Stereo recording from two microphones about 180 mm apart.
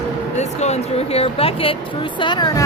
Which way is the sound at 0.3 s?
40° left (ahead or behind).